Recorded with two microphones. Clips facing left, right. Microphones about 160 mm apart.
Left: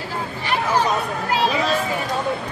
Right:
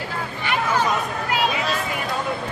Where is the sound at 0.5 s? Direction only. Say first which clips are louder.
Left 1 dB; 35° left (ahead or behind).